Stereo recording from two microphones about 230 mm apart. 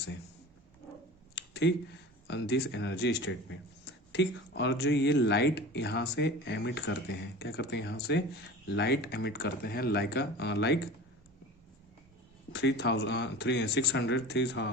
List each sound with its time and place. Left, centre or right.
1.4 s a sound: left
2.2 s speech: left
12.5 s speech: left